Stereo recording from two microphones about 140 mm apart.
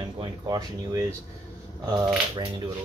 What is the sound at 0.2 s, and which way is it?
Speech, 25° right (ahead or behind).